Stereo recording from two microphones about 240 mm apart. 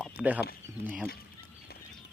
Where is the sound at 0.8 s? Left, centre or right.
Centre.